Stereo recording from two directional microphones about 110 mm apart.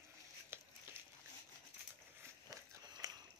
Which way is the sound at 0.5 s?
20° right (ahead or behind).